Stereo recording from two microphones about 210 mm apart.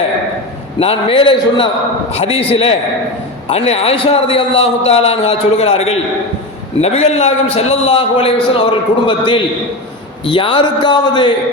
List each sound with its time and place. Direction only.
0.8 s a man's voice: 25° left (ahead or behind)